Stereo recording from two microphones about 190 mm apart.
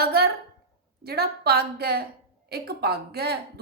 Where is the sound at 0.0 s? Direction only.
55° right (ahead or behind).